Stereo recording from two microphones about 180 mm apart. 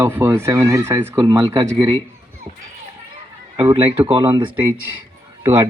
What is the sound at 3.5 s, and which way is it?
Speech, 30° right (ahead or behind).